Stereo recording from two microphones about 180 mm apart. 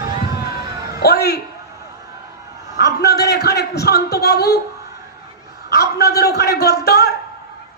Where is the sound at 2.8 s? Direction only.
65° left (ahead or behind).